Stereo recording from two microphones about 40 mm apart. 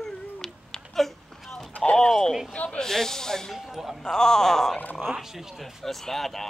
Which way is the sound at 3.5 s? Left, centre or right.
Centre.